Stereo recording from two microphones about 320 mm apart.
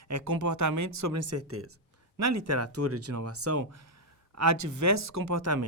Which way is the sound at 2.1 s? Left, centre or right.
Right.